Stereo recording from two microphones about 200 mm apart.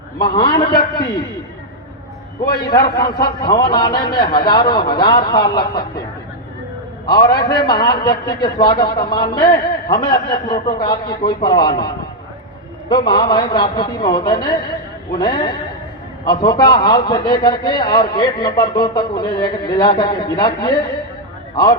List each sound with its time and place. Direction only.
0.2 s a man's voice: 20° left (ahead or behind)
2.7 s a man's voice: 20° left (ahead or behind)
7.1 s a man's voice: 20° left (ahead or behind)
12.9 s a man's voice: 20° left (ahead or behind)